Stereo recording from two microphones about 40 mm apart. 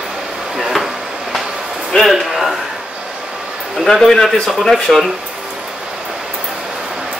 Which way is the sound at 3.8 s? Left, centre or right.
Centre.